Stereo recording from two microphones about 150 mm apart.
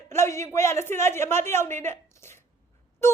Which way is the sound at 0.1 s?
15° left (ahead or behind).